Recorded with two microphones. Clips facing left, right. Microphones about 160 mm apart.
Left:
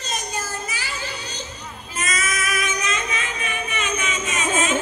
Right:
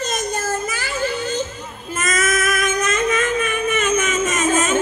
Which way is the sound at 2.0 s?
50° right (ahead or behind).